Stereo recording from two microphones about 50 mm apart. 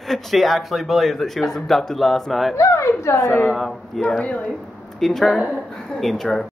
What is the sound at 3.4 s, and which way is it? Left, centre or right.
Speech, centre.